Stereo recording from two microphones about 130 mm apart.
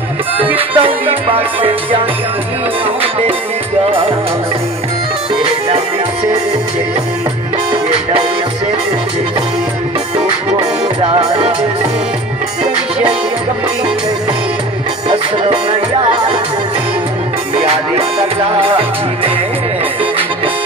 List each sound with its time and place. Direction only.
0.7 s speech: 45° right (ahead or behind)
11.0 s speech: 45° right (ahead or behind)
15.5 s speech: 40° right (ahead or behind)
17.6 s music: 50° right (ahead or behind)
18.6 s speech: 45° right (ahead or behind)